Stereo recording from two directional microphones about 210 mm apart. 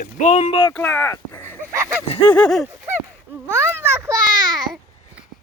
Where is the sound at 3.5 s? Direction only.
10° right (ahead or behind).